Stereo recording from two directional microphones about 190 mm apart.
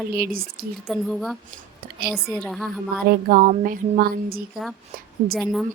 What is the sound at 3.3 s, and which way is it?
A woman's voice, 45° right (ahead or behind).